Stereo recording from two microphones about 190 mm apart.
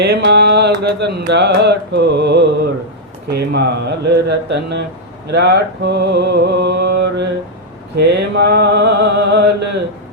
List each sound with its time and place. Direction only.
0.0 s mantra: 60° right (ahead or behind)